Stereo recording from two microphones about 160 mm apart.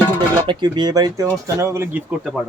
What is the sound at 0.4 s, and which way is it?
Speech, 25° right (ahead or behind).